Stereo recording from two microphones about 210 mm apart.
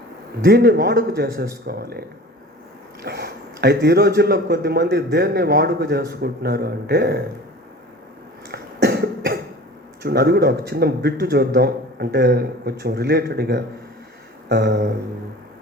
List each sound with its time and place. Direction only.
0.4 s a man's voice: 45° right (ahead or behind)
8.4 s cough: 50° right (ahead or behind)
10.0 s a man's voice: 50° right (ahead or behind)